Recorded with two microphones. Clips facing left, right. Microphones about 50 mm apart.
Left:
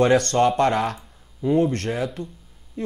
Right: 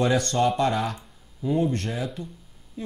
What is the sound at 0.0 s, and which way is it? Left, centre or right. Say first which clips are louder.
Speech: left 5 dB; left.